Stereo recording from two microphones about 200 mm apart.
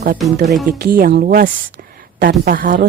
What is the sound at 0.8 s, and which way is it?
A woman's voice, 50° right (ahead or behind).